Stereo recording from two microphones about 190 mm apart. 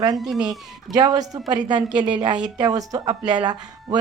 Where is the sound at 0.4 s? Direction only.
20° right (ahead or behind).